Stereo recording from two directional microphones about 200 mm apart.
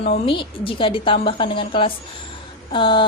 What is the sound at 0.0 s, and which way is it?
A woman's voice, 30° left (ahead or behind).